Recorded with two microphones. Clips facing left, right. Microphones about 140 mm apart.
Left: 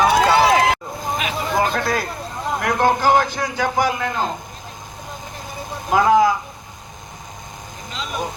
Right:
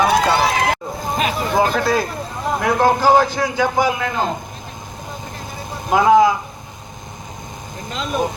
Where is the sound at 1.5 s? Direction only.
10° right (ahead or behind).